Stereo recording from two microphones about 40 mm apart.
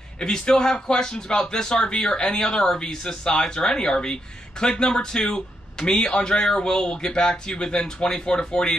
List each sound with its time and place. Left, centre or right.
0.2 s speech: centre